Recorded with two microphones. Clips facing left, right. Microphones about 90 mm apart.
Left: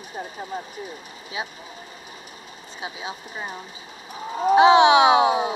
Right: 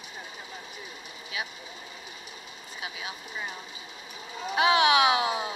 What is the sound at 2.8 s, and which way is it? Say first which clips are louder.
Speech: left 6 dB; 30° left (ahead or behind).